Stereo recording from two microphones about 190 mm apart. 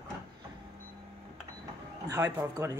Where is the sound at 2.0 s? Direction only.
20° right (ahead or behind).